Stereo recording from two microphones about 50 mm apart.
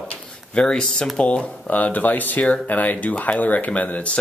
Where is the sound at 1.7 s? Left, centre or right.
Left.